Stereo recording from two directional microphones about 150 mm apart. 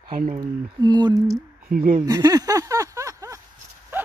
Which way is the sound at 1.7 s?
65° right (ahead or behind).